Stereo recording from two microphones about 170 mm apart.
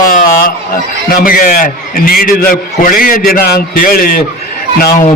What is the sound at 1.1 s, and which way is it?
A man's voice, 55° left (ahead or behind).